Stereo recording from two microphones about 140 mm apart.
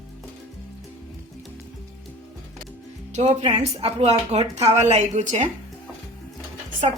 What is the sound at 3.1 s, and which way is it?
Music, 50° right (ahead or behind).